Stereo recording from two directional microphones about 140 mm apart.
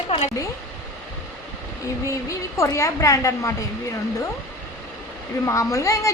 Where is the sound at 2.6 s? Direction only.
25° left (ahead or behind).